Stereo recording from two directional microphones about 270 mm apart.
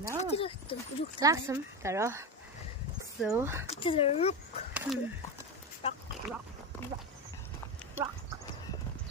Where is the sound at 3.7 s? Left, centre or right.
Centre.